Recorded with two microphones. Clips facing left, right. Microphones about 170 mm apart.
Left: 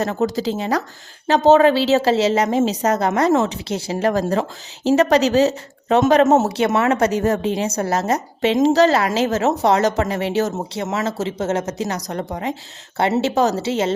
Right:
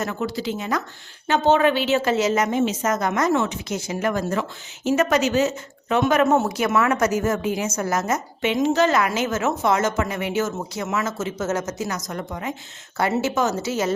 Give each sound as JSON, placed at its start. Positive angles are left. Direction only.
{"t": 0.0, "sound": "a woman's voice", "side_deg": 35}